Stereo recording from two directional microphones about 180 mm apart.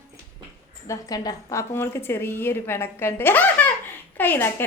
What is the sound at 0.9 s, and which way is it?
A woman's voice, 20° left (ahead or behind).